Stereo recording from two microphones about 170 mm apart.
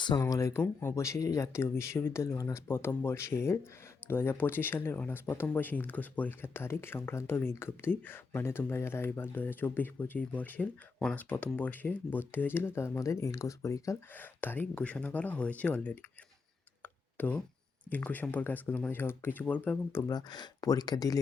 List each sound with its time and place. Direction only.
0.0 s speech: 20° left (ahead or behind)
16.8 s tick: 10° left (ahead or behind)
17.9 s speech: 10° left (ahead or behind)